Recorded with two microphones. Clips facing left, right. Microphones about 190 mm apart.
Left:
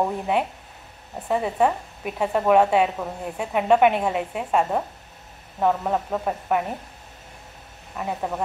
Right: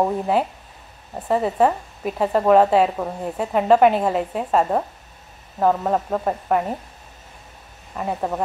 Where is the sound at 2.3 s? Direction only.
35° right (ahead or behind).